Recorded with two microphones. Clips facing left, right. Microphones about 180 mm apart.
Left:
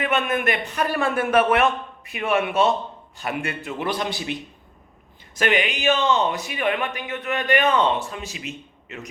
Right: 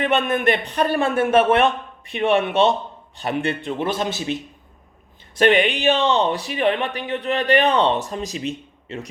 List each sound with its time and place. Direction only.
0.0 s a man's voice: 30° right (ahead or behind)
5.4 s speech: 35° right (ahead or behind)